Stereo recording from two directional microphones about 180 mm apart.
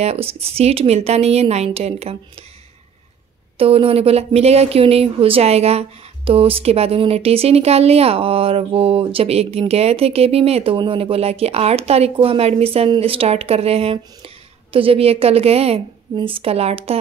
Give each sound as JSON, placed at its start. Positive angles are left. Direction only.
{"t": 0.0, "sound": "speech", "side_deg": -35}
{"t": 3.5, "sound": "speech", "side_deg": -30}